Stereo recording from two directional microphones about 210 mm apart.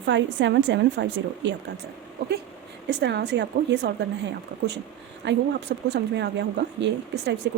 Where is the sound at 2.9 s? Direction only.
55° right (ahead or behind).